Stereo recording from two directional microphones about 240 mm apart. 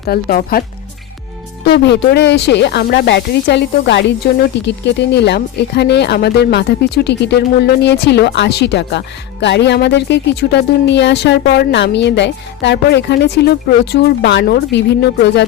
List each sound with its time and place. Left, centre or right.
0.1 s speech: left
1.6 s speech: left